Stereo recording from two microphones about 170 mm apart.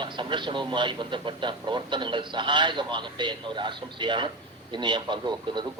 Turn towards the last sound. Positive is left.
turn(degrees=-25)  # may be behind; listen again after turning